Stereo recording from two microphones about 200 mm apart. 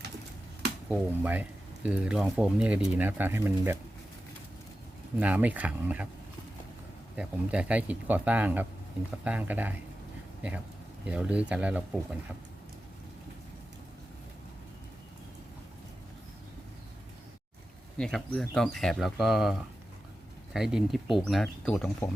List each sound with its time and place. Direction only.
0.9 s speech: 10° right (ahead or behind)
5.2 s speech: 10° right (ahead or behind)
7.2 s speech: 5° right (ahead or behind)
11.0 s speech: 5° right (ahead or behind)
17.9 s speech: 5° left (ahead or behind)